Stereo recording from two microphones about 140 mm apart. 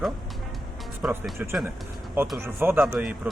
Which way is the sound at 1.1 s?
15° right (ahead or behind).